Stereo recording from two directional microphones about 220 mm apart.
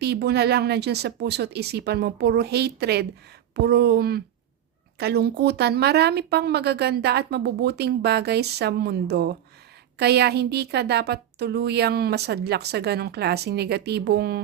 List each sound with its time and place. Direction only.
0.0 s a woman's voice: 45° right (ahead or behind)